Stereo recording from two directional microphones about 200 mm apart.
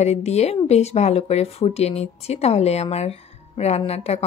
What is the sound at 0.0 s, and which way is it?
A woman's voice, 35° left (ahead or behind).